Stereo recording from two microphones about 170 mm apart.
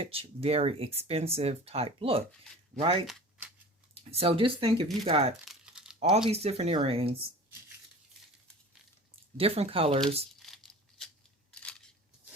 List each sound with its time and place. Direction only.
0.0 s speech: 35° right (ahead or behind)
3.1 s shuffling cards: 5° right (ahead or behind)
4.1 s speech: 35° right (ahead or behind)
5.5 s crumpling: 5° right (ahead or behind)
6.2 s speech: 35° right (ahead or behind)
9.4 s speech: 35° right (ahead or behind)
10.4 s a sound: centre (ahead or behind)
11.5 s scissors: 5° left (ahead or behind)